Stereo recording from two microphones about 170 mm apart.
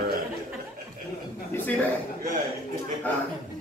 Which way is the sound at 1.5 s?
10° left (ahead or behind).